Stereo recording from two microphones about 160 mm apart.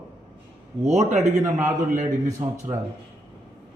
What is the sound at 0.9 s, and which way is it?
Speech, 45° right (ahead or behind).